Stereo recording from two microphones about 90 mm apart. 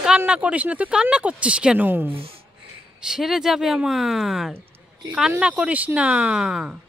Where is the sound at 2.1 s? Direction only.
90° right.